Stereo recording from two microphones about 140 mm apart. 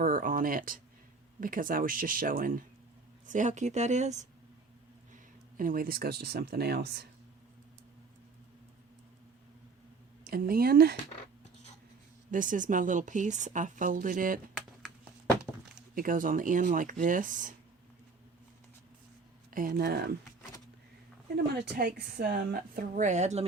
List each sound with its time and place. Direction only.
0.0 s a sound: 80° right
1.4 s a woman's voice: 75° right (ahead or behind)
3.2 s speech: 60° right (ahead or behind)
5.1 s speech: 75° right (ahead or behind)
10.2 s speech: 90° right
12.3 s speech: 70° right (ahead or behind)
16.0 s speech: 75° right (ahead or behind)
19.5 s speech: 85° right
21.8 s a woman's voice: 90° right; by 23.5 s 55° right (ahead or behind)